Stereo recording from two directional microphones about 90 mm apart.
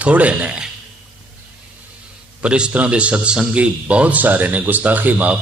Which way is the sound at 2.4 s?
10° right (ahead or behind).